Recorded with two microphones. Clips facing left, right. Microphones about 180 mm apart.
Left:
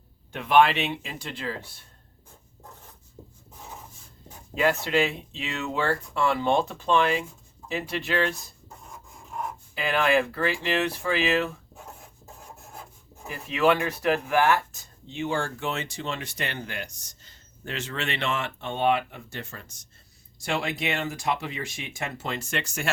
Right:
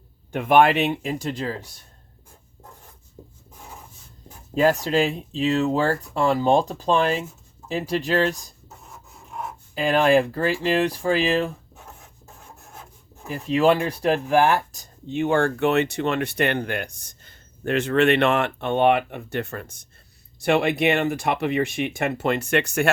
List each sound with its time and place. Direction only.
0.3 s speech: 50° right (ahead or behind)
3.2 s a sound: 5° right (ahead or behind)
4.6 s speech: 40° right (ahead or behind)
8.9 s a sound: 5° right (ahead or behind)
9.7 s speech: 35° right (ahead or behind)
12.2 s rub: centre (ahead or behind)
13.5 s speech: 35° right (ahead or behind)
14.7 s a sound: 40° right (ahead or behind)
15.1 s speech: 55° right (ahead or behind)